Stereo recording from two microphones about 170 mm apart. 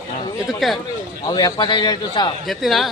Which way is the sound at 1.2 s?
25° left (ahead or behind).